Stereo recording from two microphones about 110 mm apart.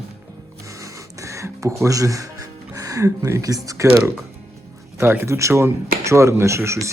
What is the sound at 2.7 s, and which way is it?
Speech, 30° right (ahead or behind).